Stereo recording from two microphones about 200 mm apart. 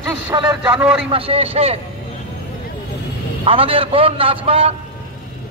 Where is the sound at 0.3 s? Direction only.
25° right (ahead or behind).